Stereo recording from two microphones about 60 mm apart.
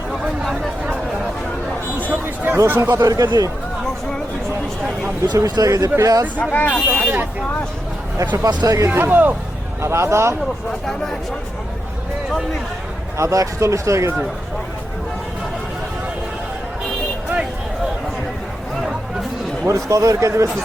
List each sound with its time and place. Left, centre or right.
0.1 s chatter: centre
2.0 s a sound: right
2.6 s speech: right
2.9 s speech: right
5.3 s speech: right
6.0 s speech: right
6.4 s speech: left
7.0 s speech: right
8.6 s speech: right
9.0 s speech: right
9.8 s speech: right
13.1 s speech: right
19.6 s speech: right